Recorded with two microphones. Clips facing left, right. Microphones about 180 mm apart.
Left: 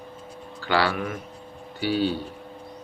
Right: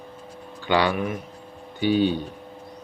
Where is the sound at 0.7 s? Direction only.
20° right (ahead or behind).